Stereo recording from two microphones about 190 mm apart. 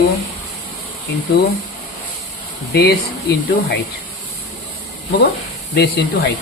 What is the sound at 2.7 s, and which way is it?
Speech, 60° left (ahead or behind).